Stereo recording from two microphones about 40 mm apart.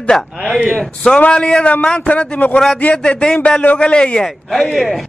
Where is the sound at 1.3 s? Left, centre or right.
Left.